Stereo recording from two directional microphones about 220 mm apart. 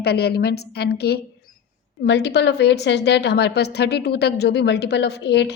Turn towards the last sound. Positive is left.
turn(degrees=50)  # may be behind; listen again after turning